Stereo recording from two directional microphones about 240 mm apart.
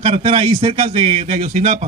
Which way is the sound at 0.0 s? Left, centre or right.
Right.